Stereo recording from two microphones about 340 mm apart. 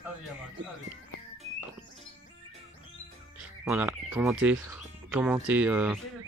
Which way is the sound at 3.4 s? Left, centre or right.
Centre.